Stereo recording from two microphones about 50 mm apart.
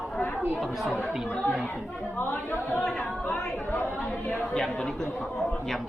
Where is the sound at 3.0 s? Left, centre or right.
Left.